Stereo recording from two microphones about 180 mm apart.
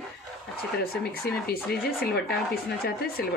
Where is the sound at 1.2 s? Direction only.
55° left (ahead or behind).